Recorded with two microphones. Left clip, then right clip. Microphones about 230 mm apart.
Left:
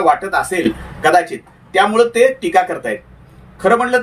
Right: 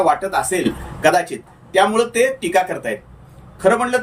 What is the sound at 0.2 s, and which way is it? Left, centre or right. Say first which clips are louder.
A man's voice: left 2 dB; centre.